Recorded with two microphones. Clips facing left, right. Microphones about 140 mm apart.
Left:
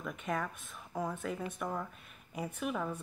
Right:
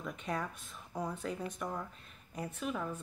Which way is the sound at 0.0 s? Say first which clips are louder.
Left 1 dB; centre (ahead or behind).